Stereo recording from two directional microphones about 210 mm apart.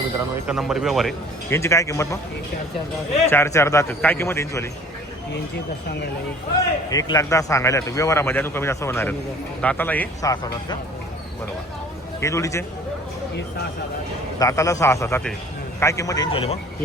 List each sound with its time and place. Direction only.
0.4 s speech: 5° right (ahead or behind)
1.5 s speech: 15° left (ahead or behind)
3.2 s speech: 10° left (ahead or behind)
6.9 s speech: 15° left (ahead or behind)
12.2 s speech: 15° left (ahead or behind)
14.3 s speech: 15° left (ahead or behind)